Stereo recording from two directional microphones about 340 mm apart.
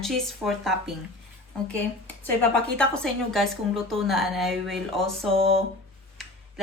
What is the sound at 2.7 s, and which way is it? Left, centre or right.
Speech, centre.